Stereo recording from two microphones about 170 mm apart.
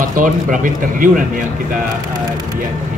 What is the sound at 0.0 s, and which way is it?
A man's voice, 50° right (ahead or behind).